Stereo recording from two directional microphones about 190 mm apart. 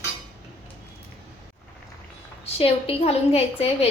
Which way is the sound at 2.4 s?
30° left (ahead or behind).